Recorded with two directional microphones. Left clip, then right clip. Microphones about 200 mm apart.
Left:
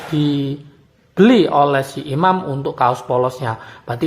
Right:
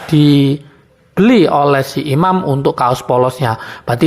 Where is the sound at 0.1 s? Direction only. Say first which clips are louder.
Right 9 dB; 25° right (ahead or behind).